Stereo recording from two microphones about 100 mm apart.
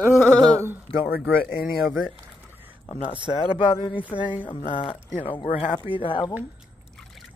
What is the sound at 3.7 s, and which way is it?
Speech, 55° left (ahead or behind).